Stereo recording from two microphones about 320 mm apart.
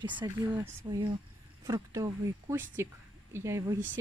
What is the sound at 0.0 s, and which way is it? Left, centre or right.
Speech, centre.